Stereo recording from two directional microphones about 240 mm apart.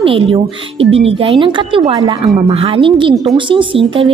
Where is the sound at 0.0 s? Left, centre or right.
Right.